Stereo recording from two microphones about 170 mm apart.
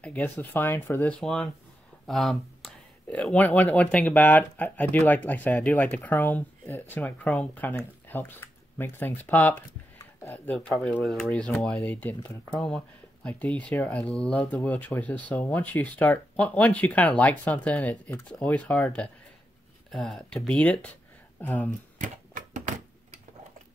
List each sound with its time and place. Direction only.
0.0 s speech: 10° left (ahead or behind)
21.9 s typewriter: 45° right (ahead or behind)